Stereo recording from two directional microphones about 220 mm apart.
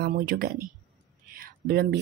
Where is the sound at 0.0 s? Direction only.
45° right (ahead or behind).